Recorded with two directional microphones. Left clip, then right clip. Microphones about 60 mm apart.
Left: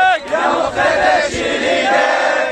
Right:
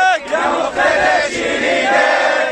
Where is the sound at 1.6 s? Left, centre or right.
Centre.